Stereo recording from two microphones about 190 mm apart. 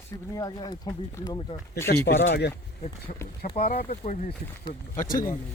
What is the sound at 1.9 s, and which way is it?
Speech, 65° left (ahead or behind).